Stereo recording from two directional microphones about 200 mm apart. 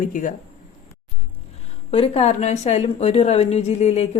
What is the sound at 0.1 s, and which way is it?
Speech, 40° left (ahead or behind).